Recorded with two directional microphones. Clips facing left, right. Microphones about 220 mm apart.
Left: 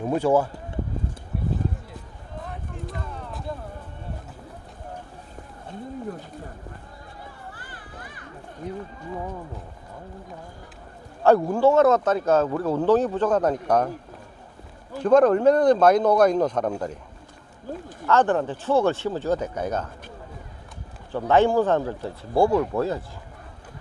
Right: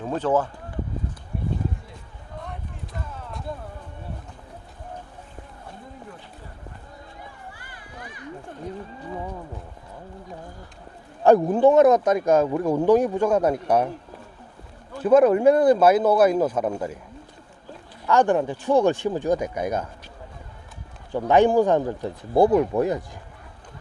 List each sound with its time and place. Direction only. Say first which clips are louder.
0.0 s speech: left 2 dB; 10° left (ahead or behind)
2.4 s a sound: left 3 dB; centre (ahead or behind)
11.2 s speech: right 2 dB; 15° right (ahead or behind)
15.0 s speech: right 1 dB; 10° right (ahead or behind)
18.0 s speech: right 1 dB; 15° right (ahead or behind)
21.1 s speech: right 2 dB; 15° right (ahead or behind)